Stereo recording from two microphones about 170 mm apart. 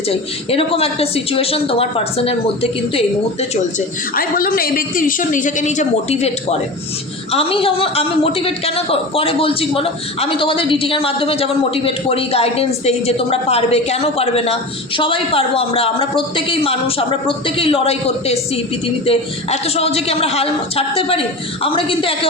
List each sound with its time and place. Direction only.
0.1 s a woman's voice: 35° left (ahead or behind)
3.5 s a woman's voice: 50° left (ahead or behind); by 22.3 s 35° left (ahead or behind)